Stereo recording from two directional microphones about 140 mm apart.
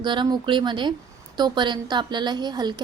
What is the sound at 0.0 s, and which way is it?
A woman's voice, 35° right (ahead or behind).